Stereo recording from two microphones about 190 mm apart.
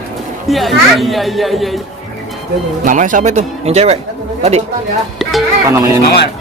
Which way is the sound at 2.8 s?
45° right (ahead or behind).